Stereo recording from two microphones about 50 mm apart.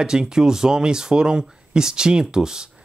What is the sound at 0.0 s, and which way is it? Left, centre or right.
Speech, centre.